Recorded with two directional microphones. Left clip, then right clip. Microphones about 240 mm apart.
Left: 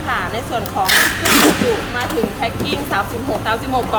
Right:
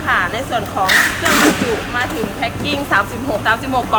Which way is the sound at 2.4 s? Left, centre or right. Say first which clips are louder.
Right 1 dB; centre.